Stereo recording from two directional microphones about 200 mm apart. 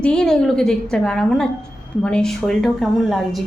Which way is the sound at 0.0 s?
5° left (ahead or behind).